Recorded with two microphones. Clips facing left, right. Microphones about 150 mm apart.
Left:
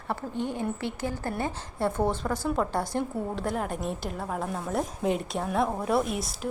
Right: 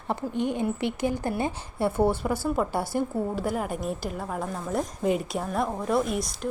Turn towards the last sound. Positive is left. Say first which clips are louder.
# right 1 dB
turn(degrees=0)  # may be behind; listen again after turning